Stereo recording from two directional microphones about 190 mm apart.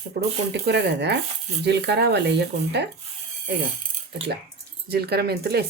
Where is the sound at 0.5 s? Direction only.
65° right (ahead or behind).